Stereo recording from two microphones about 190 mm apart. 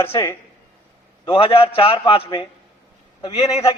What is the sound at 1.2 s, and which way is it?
A man's voice, 30° left (ahead or behind).